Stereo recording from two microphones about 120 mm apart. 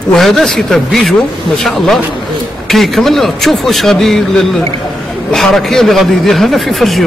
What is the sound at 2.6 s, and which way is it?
A man's voice, centre (ahead or behind).